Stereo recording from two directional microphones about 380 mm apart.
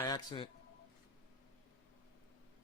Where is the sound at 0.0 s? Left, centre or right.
Centre.